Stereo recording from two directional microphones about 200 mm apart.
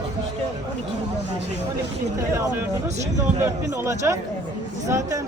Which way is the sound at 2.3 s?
15° right (ahead or behind).